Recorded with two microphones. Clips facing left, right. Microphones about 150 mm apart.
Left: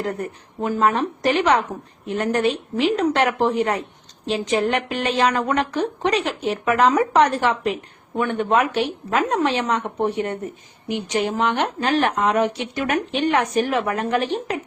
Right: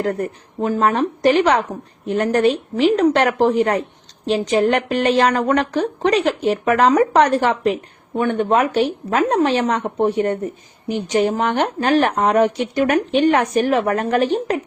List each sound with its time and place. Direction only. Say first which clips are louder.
0.0 s a woman's voice: right 5 dB; 45° right (ahead or behind)